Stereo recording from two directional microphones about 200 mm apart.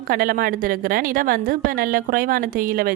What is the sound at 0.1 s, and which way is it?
A woman's voice, 45° right (ahead or behind).